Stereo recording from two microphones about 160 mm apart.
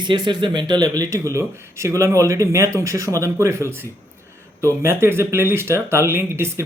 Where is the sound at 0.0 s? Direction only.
30° right (ahead or behind).